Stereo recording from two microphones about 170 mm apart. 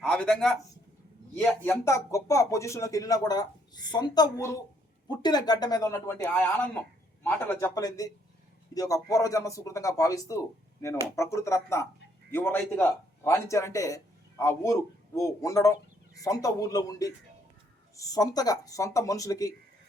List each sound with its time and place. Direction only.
0.0 s a man's voice: 5° left (ahead or behind)